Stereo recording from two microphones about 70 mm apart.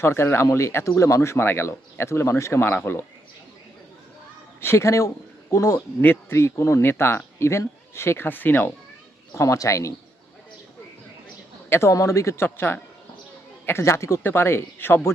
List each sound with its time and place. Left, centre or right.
0.0 s speech: left
4.6 s speech: left
6.0 s speech: left
9.3 s speech: left
11.7 s speech: left